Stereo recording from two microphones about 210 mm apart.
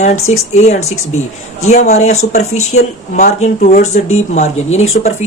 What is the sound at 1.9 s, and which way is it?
Speech, 30° left (ahead or behind).